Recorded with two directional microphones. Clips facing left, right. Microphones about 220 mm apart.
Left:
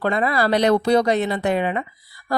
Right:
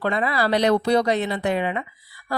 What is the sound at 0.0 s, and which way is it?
Speech, 45° left (ahead or behind).